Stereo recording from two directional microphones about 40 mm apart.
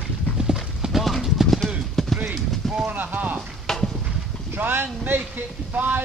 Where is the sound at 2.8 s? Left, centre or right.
Right.